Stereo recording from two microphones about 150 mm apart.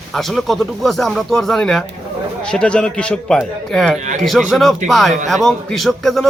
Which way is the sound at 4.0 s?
55° right (ahead or behind).